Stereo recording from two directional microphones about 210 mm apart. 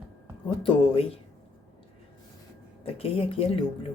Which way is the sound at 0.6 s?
25° left (ahead or behind).